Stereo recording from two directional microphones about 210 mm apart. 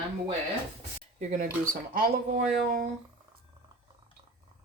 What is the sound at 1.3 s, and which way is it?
Speech, 40° right (ahead or behind).